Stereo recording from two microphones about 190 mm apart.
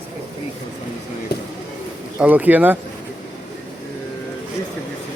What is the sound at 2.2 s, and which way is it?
Speech, 10° right (ahead or behind).